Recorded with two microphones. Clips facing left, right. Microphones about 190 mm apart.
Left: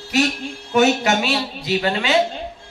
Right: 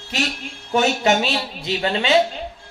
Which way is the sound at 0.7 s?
30° right (ahead or behind).